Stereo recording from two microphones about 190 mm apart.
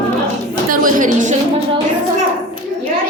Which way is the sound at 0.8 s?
40° right (ahead or behind).